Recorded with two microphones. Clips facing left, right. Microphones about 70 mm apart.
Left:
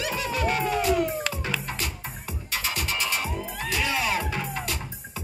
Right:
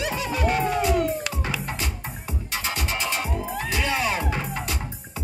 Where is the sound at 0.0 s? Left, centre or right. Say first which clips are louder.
Right 2 dB; right.